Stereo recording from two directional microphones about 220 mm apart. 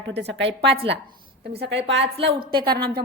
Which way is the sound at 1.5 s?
50° right (ahead or behind).